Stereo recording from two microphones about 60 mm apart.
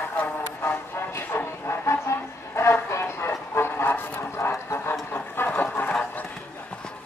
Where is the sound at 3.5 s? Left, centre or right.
Left.